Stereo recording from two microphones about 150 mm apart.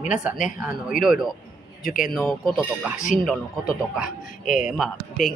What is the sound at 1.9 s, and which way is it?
Speech, 70° left (ahead or behind).